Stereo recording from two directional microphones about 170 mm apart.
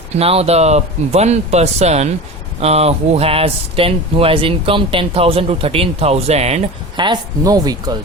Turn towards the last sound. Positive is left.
turn(degrees=-20)  # may be behind; listen again after turning